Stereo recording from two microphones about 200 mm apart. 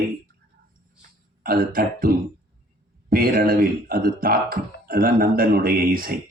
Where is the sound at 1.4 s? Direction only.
45° right (ahead or behind).